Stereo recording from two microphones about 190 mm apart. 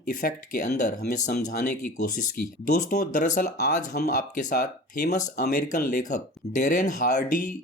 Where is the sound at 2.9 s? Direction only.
45° left (ahead or behind).